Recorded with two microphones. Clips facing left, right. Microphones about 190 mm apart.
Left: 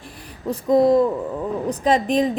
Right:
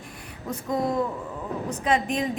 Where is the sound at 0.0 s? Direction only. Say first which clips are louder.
Left 7 dB; 35° left (ahead or behind).